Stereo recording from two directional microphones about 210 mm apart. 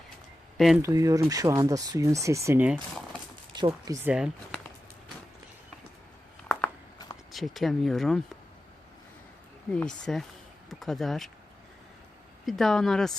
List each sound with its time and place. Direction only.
0.5 s speech: centre (ahead or behind)
0.8 s speech: 15° right (ahead or behind); by 4.7 s centre (ahead or behind)
7.3 s speech: centre (ahead or behind)
9.7 s speech: 5° left (ahead or behind)
12.5 s speech: centre (ahead or behind)